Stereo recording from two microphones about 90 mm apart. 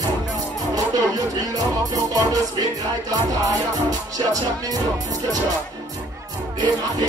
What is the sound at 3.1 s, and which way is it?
Speech, 40° right (ahead or behind).